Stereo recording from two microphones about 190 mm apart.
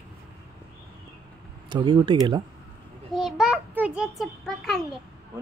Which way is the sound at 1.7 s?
25° right (ahead or behind).